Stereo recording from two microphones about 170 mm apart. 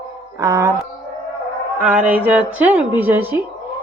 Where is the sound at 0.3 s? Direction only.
15° right (ahead or behind).